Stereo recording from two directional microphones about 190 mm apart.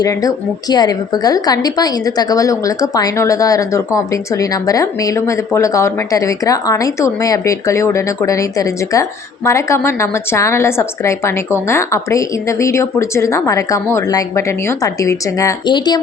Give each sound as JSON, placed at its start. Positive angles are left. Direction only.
{"t": 0.0, "sound": "a woman's voice", "side_deg": 20}